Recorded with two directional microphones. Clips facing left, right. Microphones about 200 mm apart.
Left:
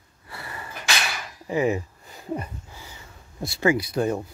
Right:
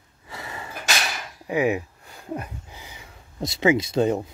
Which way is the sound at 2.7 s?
15° right (ahead or behind).